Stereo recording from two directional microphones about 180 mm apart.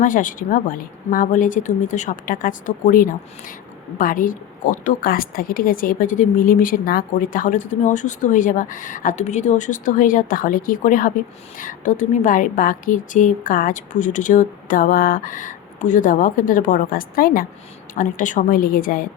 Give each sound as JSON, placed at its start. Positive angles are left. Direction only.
{"t": 0.0, "sound": "speech", "side_deg": 45}